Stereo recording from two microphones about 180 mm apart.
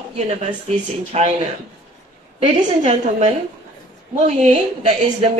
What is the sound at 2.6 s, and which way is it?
Speech, 40° right (ahead or behind).